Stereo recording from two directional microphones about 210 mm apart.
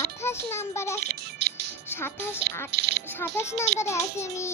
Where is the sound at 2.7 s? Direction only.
50° right (ahead or behind).